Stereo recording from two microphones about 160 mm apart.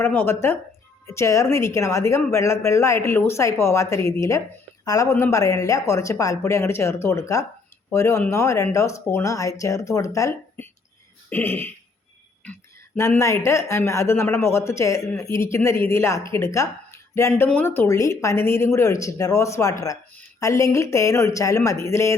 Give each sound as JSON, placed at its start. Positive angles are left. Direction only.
{"t": 0.0, "sound": "a woman's voice", "side_deg": 15}
{"t": 13.0, "sound": "a woman's voice", "side_deg": 15}